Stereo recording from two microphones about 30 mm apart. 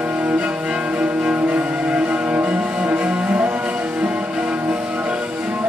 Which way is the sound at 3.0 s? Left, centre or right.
Right.